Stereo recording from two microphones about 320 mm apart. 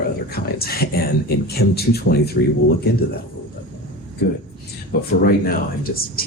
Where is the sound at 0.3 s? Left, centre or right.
Left.